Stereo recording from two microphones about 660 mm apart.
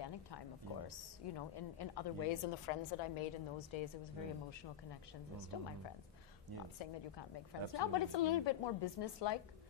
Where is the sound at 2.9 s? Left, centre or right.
Left.